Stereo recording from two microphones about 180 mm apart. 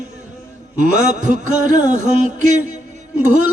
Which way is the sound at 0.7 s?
45° right (ahead or behind).